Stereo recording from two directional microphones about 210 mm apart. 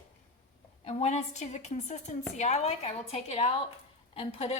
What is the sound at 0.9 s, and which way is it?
Speech, 30° left (ahead or behind).